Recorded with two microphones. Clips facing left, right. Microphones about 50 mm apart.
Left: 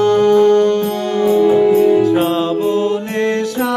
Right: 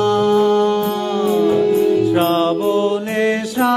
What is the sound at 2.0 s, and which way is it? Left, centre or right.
Music, centre.